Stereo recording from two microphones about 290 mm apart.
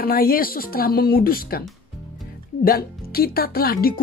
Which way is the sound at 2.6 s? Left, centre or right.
Left.